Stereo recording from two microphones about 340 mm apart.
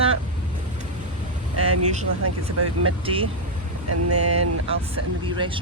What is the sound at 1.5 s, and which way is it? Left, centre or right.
Speech, right.